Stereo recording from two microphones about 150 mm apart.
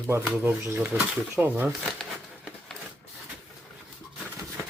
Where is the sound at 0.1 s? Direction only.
15° right (ahead or behind).